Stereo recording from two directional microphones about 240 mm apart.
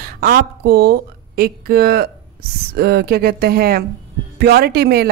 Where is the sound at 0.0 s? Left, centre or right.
Right.